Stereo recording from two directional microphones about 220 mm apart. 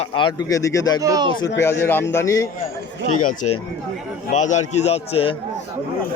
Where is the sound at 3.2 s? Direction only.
35° left (ahead or behind).